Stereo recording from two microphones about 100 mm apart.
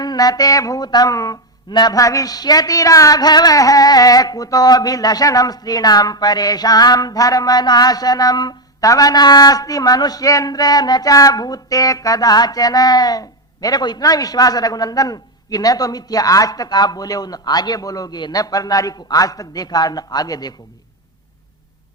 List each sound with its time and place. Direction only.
0.0 s speech: 40° left (ahead or behind)